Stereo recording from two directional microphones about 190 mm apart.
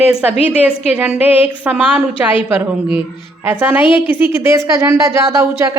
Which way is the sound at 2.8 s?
25° left (ahead or behind).